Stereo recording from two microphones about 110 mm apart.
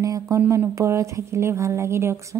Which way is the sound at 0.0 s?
30° right (ahead or behind).